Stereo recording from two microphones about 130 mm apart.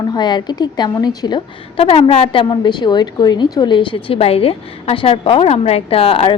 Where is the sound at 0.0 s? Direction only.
35° left (ahead or behind).